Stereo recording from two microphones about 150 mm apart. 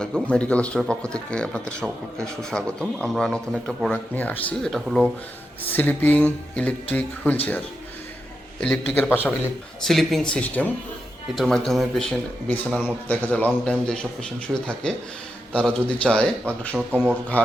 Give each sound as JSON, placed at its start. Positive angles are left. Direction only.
{"t": 0.0, "sound": "speech", "side_deg": 5}
{"t": 5.7, "sound": "a man's voice", "side_deg": 10}
{"t": 7.3, "sound": "a man's voice", "side_deg": 10}
{"t": 8.6, "sound": "a man's voice", "side_deg": 5}
{"t": 9.8, "sound": "a man's voice", "side_deg": 0}